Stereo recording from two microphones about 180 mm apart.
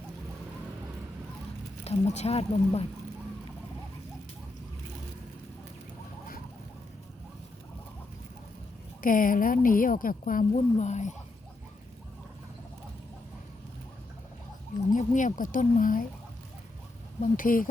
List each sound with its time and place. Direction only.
1.8 s speech: 35° left (ahead or behind)
9.0 s a woman's voice: 50° left (ahead or behind)
14.8 s a woman's voice: 45° left (ahead or behind)
17.2 s a woman's voice: 50° left (ahead or behind)